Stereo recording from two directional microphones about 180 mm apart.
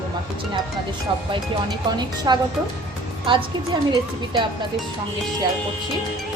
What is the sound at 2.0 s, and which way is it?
Speech, 25° right (ahead or behind).